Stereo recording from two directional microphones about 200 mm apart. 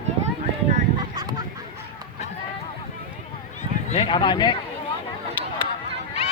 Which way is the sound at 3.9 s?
25° left (ahead or behind).